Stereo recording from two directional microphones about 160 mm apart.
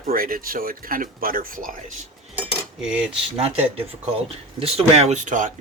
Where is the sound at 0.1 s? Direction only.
65° right (ahead or behind).